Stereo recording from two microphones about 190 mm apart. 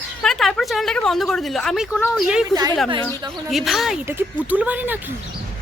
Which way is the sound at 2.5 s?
20° right (ahead or behind).